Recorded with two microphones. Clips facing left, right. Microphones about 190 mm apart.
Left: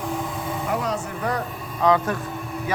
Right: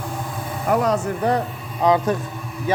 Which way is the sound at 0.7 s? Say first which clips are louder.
Right 8 dB; 45° right (ahead or behind).